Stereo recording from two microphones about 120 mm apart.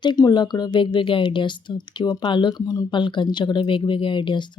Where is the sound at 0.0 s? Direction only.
35° left (ahead or behind).